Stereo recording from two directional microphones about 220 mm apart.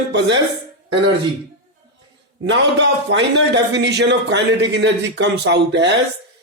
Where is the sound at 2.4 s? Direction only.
55° right (ahead or behind).